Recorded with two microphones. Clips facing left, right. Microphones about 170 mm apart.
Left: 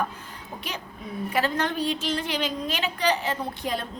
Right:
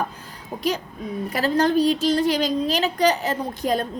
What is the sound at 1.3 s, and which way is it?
A woman's voice, 35° right (ahead or behind).